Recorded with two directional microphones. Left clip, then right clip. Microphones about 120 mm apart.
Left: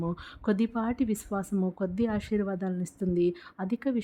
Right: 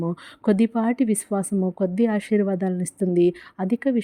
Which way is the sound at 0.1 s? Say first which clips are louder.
Right 8 dB; 40° right (ahead or behind).